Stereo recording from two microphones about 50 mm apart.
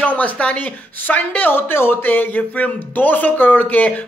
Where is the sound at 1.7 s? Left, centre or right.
Left.